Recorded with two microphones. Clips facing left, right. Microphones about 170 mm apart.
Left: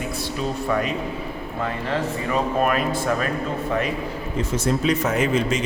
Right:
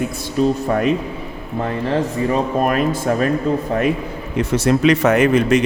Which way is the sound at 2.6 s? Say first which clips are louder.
Right 4 dB; 45° right (ahead or behind).